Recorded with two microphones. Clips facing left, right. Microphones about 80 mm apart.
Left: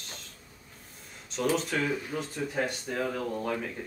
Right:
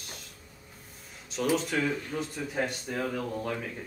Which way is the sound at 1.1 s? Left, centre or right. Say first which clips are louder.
Even; centre.